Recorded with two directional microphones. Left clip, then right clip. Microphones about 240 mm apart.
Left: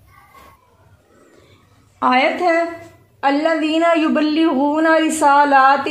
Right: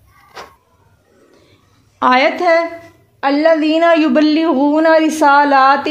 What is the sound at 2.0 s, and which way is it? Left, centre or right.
A woman's voice, right.